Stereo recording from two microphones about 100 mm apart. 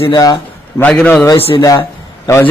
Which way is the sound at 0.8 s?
15° left (ahead or behind).